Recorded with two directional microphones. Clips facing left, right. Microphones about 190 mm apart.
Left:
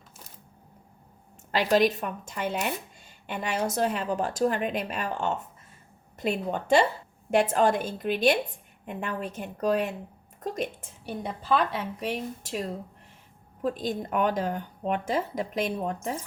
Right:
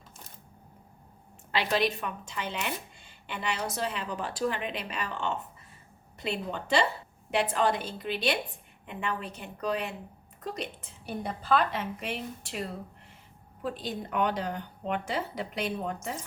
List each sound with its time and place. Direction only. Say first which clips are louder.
1.5 s speech: left 5 dB; 45° left (ahead or behind)
12.0 s speech: left 4 dB; 45° left (ahead or behind)